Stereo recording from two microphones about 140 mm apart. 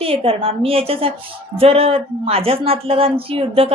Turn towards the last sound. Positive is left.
turn(degrees=-40)  # may be behind; listen again after turning